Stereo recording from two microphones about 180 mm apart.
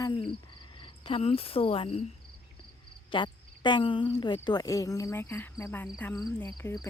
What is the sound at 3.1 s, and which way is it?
Speech, 25° left (ahead or behind).